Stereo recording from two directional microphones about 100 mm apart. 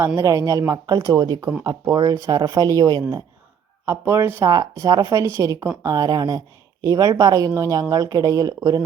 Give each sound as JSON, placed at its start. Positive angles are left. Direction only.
{"t": 0.2, "sound": "speech", "side_deg": -35}
{"t": 3.8, "sound": "speech", "side_deg": -25}
{"t": 4.5, "sound": "speech", "side_deg": -40}